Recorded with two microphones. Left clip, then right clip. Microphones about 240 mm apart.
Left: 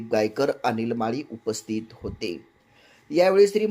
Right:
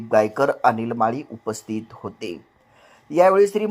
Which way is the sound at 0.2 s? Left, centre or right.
Centre.